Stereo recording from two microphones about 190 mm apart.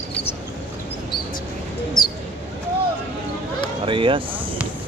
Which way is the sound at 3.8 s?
30° right (ahead or behind).